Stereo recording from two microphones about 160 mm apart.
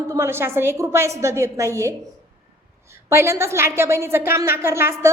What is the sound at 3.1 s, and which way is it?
A woman's voice, 15° right (ahead or behind).